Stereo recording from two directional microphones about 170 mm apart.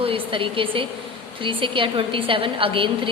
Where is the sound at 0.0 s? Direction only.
30° right (ahead or behind).